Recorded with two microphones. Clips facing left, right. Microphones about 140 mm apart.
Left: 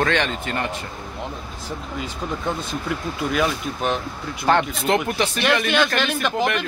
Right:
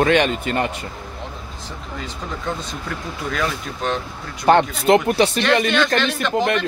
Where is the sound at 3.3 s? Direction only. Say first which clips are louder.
Left 2 dB; 10° left (ahead or behind).